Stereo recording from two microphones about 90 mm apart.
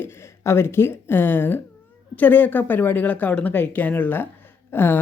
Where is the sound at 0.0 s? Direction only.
30° left (ahead or behind).